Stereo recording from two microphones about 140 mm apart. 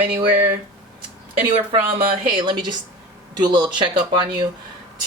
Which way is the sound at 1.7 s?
35° right (ahead or behind).